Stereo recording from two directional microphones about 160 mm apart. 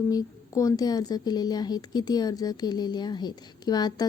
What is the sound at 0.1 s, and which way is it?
Speech, 20° left (ahead or behind).